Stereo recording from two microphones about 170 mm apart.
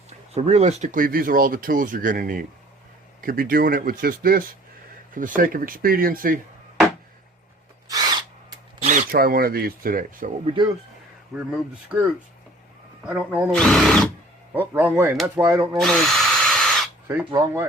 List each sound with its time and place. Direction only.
0.3 s speech: 40° right (ahead or behind); by 6.4 s 55° right (ahead or behind)
7.9 s owl: 25° right (ahead or behind)
8.8 s speech: 45° right (ahead or behind)
10.4 s speech: 30° right (ahead or behind)
11.3 s speech: 5° right (ahead or behind)
13.1 s a sound: 10° right (ahead or behind)
13.5 s speech: 5° left (ahead or behind)
14.5 s speech: 10° right (ahead or behind)
15.4 s a sound: 15° right (ahead or behind)
15.8 s drill: centre (ahead or behind)
17.1 s a sound: 15° right (ahead or behind)